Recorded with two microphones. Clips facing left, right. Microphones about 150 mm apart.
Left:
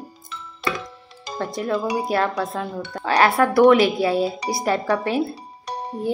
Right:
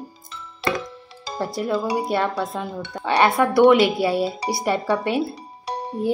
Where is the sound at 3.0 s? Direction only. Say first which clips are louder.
Even; 25° right (ahead or behind).